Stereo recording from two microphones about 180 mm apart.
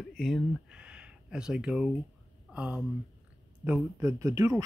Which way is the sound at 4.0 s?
15° right (ahead or behind).